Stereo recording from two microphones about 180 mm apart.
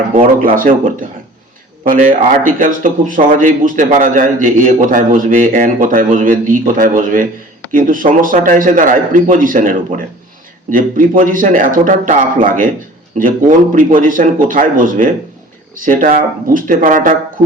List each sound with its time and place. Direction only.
0.4 s speech: 50° right (ahead or behind)